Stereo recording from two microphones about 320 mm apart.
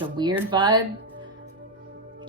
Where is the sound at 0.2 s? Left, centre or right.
Centre.